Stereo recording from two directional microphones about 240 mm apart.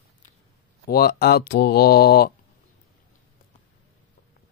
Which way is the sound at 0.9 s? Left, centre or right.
Left.